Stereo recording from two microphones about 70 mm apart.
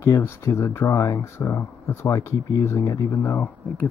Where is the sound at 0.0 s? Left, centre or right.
Left.